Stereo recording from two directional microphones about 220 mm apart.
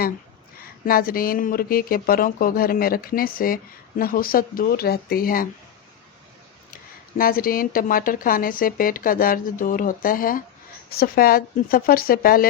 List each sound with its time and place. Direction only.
0.6 s speech: 40° left (ahead or behind)
7.2 s speech: 40° left (ahead or behind)